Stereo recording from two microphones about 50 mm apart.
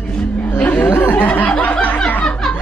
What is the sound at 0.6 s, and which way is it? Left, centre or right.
Speech, left.